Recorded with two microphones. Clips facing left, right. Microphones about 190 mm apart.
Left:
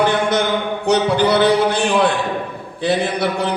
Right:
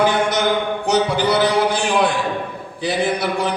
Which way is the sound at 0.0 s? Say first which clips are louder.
Left 1 dB; 60° left (ahead or behind).